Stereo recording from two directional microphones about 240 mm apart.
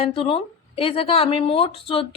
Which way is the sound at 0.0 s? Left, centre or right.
Left.